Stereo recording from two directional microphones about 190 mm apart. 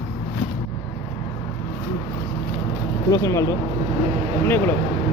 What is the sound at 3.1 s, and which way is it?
Speech, 15° left (ahead or behind).